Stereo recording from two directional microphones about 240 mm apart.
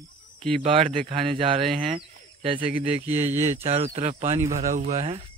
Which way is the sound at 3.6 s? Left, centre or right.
Right.